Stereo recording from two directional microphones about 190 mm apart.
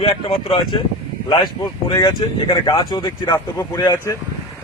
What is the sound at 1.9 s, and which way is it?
Speech, 20° left (ahead or behind).